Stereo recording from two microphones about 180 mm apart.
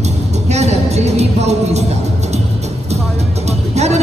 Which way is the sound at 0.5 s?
40° right (ahead or behind).